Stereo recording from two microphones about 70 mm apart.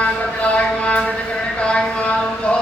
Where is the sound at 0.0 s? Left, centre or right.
Centre.